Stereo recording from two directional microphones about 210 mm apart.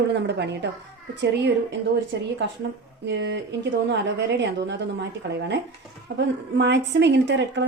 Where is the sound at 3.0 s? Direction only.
55° right (ahead or behind).